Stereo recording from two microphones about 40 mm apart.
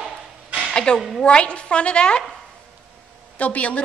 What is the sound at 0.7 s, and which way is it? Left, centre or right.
A woman's voice, left.